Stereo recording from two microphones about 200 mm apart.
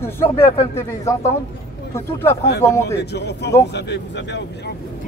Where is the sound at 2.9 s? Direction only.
55° left (ahead or behind).